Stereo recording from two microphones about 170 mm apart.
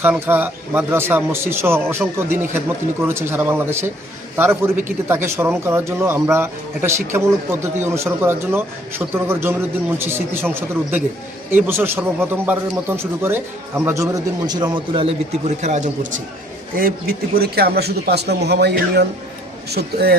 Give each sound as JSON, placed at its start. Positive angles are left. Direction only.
{"t": 0.0, "sound": "a man's voice", "side_deg": -10}
{"t": 16.7, "sound": "speech", "side_deg": -60}